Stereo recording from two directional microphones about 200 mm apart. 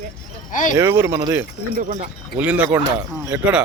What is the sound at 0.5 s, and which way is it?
Speech, 40° left (ahead or behind).